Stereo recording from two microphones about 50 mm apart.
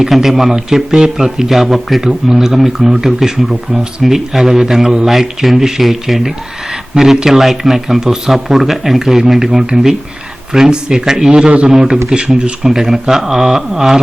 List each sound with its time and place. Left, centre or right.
0.0 s speech: centre
12.6 s speech: centre